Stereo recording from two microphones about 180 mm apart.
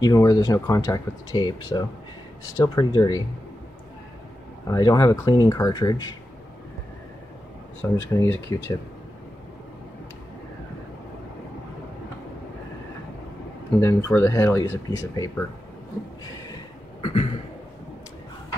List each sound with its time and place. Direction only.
0.0 s speech: 20° left (ahead or behind)
4.6 s speech: 20° left (ahead or behind)
8.1 s speech: 15° left (ahead or behind)
13.7 s speech: 15° left (ahead or behind)
17.0 s a sound: 35° left (ahead or behind)